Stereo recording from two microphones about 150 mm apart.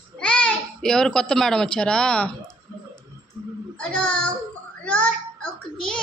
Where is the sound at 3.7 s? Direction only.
5° left (ahead or behind).